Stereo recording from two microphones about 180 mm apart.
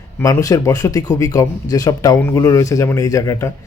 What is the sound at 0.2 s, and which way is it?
Speech, 20° left (ahead or behind).